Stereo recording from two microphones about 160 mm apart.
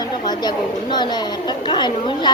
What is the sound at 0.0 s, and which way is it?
A woman's voice, 25° left (ahead or behind).